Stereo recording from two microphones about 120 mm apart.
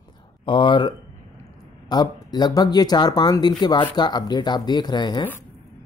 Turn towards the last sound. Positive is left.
turn(degrees=40)  # may be behind; listen again after turning